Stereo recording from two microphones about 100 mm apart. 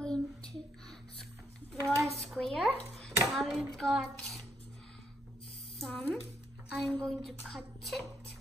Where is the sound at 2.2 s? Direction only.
Centre (ahead or behind).